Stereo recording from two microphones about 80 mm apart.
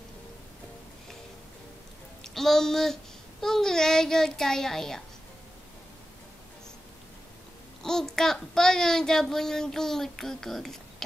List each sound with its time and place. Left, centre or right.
2.2 s a child's voice: centre
7.8 s a child's voice: centre